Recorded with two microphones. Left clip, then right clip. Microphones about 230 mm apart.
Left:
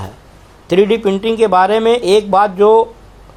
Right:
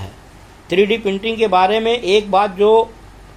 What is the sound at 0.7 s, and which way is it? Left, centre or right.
Speech, left.